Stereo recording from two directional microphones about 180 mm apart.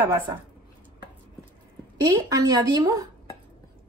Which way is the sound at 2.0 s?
20° right (ahead or behind).